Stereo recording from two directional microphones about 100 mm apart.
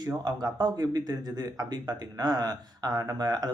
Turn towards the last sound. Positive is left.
turn(degrees=-40)  # may be behind; listen again after turning